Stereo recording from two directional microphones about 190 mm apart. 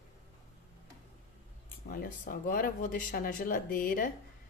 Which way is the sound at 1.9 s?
45° left (ahead or behind).